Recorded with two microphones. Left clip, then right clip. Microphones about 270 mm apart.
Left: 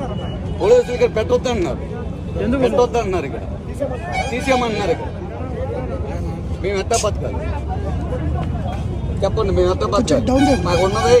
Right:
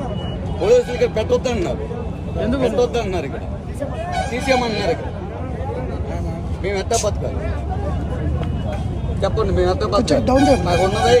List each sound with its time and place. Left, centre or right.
0.6 s speech: centre
6.6 s speech: centre
9.2 s speech: centre